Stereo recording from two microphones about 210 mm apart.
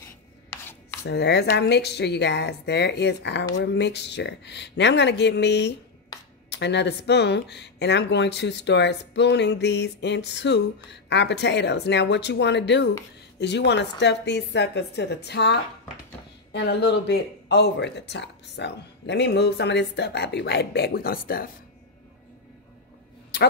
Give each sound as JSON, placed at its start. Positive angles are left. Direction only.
{"t": 1.0, "sound": "speech", "side_deg": 50}